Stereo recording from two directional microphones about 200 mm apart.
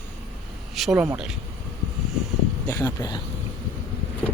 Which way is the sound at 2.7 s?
15° left (ahead or behind).